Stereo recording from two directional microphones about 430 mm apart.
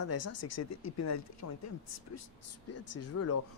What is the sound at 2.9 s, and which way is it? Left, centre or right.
Speech, left.